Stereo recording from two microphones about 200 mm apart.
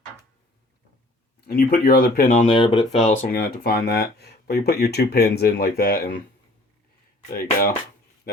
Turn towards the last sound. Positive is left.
turn(degrees=50)  # may be behind; listen again after turning